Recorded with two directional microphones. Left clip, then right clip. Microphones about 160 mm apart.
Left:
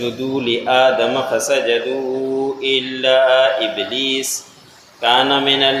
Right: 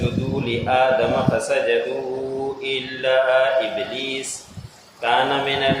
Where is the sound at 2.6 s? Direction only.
30° left (ahead or behind).